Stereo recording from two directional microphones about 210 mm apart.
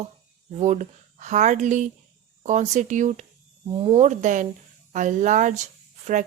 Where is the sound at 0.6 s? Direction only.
35° right (ahead or behind).